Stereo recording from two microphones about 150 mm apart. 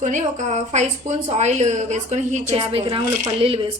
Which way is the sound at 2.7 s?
40° right (ahead or behind).